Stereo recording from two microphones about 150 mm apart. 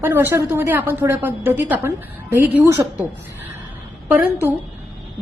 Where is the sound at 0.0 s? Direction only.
15° right (ahead or behind).